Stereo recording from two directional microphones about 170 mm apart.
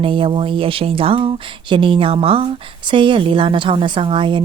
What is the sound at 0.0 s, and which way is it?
A woman's voice, 30° right (ahead or behind).